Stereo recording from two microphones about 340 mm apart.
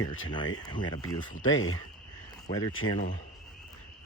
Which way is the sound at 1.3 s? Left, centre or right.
Left.